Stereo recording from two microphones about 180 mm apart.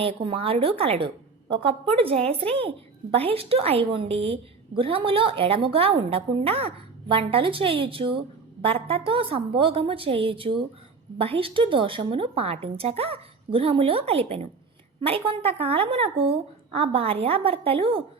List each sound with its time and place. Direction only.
0.0 s a woman's voice: 30° right (ahead or behind)